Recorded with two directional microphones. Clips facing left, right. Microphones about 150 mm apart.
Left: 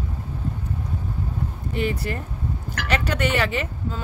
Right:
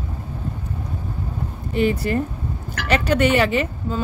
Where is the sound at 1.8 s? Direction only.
20° right (ahead or behind).